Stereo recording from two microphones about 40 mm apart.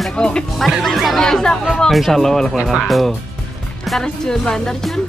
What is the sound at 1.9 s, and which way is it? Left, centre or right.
Speech, centre.